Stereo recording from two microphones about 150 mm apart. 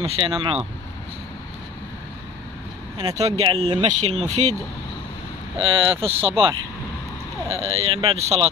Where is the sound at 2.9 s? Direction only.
25° right (ahead or behind).